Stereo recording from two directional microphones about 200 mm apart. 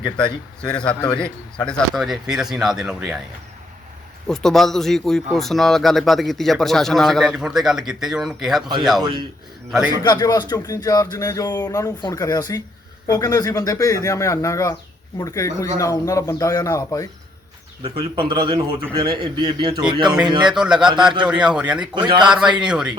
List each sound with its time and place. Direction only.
0.6 s speech: 5° left (ahead or behind)
4.3 s speech: centre (ahead or behind)
10.0 s speech: 20° left (ahead or behind)
17.8 s a man's voice: 25° right (ahead or behind)
20.5 s speech: 5° right (ahead or behind)
21.9 s a man's voice: 25° right (ahead or behind)
22.3 s speech: 5° right (ahead or behind)